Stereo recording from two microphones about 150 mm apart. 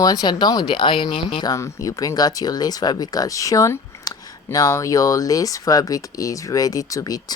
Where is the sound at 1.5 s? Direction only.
20° left (ahead or behind).